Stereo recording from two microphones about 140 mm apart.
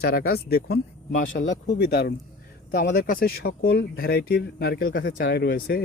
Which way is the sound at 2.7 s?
90° left.